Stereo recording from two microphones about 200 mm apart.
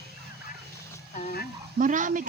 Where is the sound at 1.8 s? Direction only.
40° right (ahead or behind).